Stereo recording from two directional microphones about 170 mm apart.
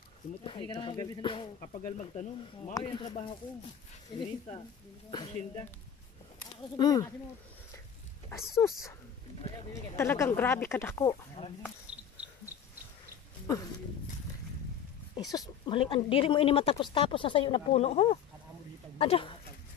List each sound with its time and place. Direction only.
0.4 s speech: 30° left (ahead or behind)
2.7 s speech: 30° left (ahead or behind)
6.8 s speech: 20° left (ahead or behind)
8.6 s speech: 15° left (ahead or behind)
9.9 s speech: 15° left (ahead or behind)
15.1 s speech: 20° left (ahead or behind)